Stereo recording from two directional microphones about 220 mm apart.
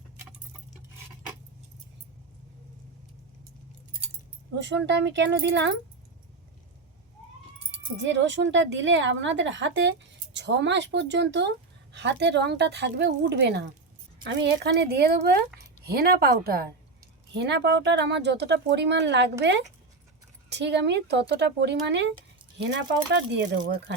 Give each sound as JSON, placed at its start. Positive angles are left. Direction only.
{"t": 4.6, "sound": "a woman's voice", "side_deg": -55}
{"t": 8.0, "sound": "a woman's voice", "side_deg": -55}